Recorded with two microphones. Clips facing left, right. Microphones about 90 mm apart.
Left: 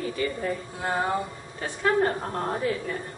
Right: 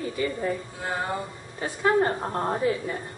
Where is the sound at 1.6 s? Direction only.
15° right (ahead or behind).